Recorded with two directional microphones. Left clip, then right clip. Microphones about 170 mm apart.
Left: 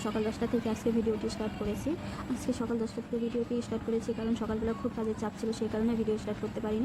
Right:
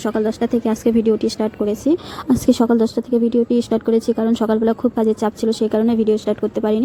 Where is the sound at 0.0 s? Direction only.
45° right (ahead or behind).